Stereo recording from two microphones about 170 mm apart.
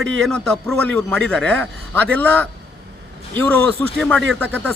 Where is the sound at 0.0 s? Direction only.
5° left (ahead or behind).